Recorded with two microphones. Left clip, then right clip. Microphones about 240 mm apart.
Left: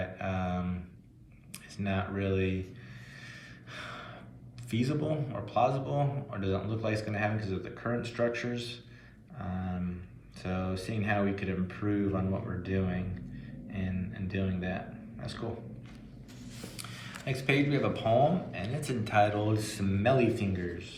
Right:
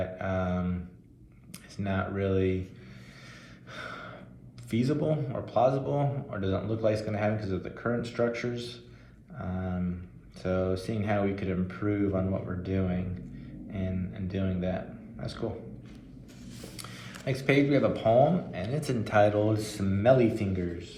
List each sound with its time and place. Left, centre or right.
0.0 s a sound: right
1.7 s a man's voice: right
3.7 s gasp: right
4.7 s a man's voice: right
9.4 s a sound: right
10.4 s a man's voice: right
14.1 s a man's voice: right
17.2 s a man's voice: right